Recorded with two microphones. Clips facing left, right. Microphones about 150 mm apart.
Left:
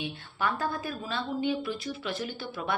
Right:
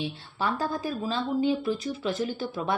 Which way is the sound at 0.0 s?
35° right (ahead or behind).